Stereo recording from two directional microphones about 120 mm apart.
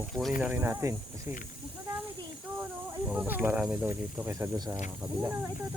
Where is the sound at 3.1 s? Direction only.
10° right (ahead or behind); by 4.7 s 30° right (ahead or behind).